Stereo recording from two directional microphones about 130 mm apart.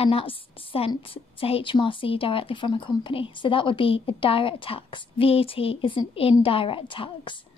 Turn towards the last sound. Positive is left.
turn(degrees=40)  # may be behind; listen again after turning